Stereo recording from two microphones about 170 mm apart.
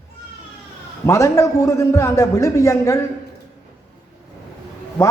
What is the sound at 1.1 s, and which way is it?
Speech, 15° left (ahead or behind).